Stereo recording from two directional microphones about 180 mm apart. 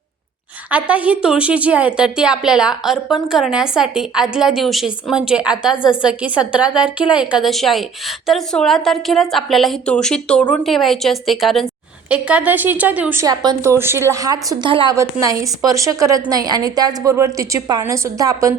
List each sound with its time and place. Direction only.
0.7 s a woman's voice: 10° right (ahead or behind)
13.2 s a woman's voice: 20° right (ahead or behind)